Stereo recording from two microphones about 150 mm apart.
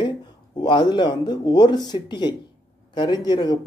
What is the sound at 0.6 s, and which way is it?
Speech, 30° left (ahead or behind).